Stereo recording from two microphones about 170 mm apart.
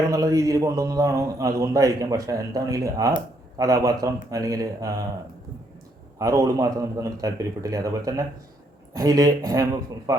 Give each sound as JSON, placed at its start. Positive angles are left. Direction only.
{"t": 0.1, "sound": "a man's voice", "side_deg": -20}
{"t": 6.1, "sound": "a man's voice", "side_deg": -20}